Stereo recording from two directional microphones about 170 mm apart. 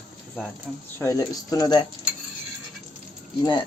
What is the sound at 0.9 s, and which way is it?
Speech, 20° left (ahead or behind).